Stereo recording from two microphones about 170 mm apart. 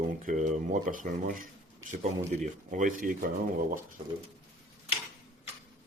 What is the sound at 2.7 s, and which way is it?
Speech, 50° right (ahead or behind).